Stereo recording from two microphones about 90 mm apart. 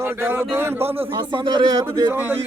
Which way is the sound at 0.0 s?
25° right (ahead or behind).